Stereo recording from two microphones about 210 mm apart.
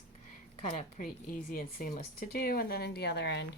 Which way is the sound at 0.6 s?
30° left (ahead or behind).